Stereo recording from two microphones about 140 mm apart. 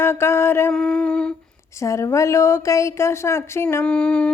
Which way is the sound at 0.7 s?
5° left (ahead or behind).